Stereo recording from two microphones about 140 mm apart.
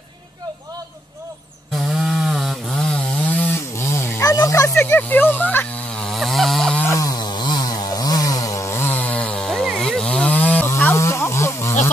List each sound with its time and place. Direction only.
2.0 s chainsaw: centre (ahead or behind)
6.0 s chainsaw: centre (ahead or behind)
6.8 s chainsaw: 20° left (ahead or behind)